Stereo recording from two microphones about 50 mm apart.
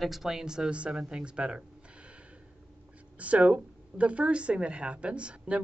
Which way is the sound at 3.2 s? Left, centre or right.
Right.